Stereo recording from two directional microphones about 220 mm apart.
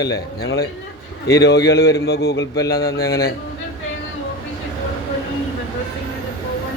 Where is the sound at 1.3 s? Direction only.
50° left (ahead or behind).